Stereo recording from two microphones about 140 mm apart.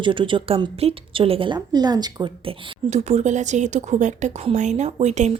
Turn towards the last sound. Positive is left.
turn(degrees=-55)  # may be behind; listen again after turning